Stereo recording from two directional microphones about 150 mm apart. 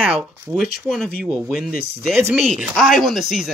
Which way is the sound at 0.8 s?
Centre (ahead or behind).